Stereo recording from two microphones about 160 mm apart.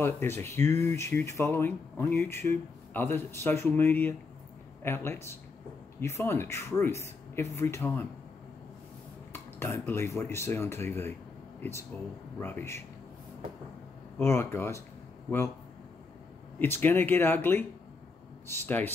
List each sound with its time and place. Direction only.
0.0 s speech: 15° left (ahead or behind)
9.3 s speech: 15° left (ahead or behind)
14.1 s speech: 15° left (ahead or behind)
16.5 s speech: 15° left (ahead or behind)